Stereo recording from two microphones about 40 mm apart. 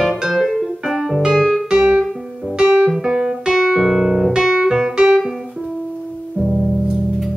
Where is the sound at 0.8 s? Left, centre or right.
Centre.